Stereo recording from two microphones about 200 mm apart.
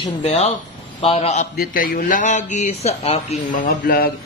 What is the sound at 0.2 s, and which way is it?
Speech, 35° left (ahead or behind).